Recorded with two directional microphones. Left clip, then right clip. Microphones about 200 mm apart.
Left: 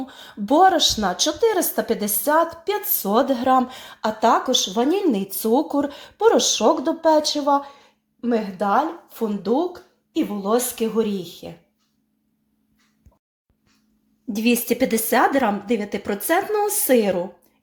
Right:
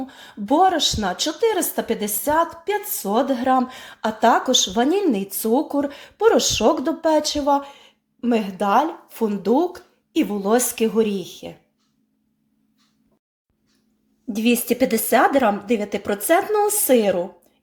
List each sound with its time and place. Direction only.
0.0 s speech: centre (ahead or behind)
14.3 s speech: 5° right (ahead or behind)